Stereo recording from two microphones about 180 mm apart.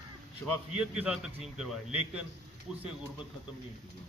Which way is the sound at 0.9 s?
5° right (ahead or behind).